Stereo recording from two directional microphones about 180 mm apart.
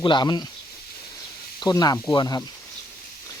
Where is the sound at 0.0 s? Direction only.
25° left (ahead or behind).